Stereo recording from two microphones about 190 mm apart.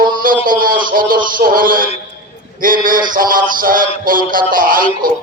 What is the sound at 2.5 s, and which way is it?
Speech, 45° right (ahead or behind).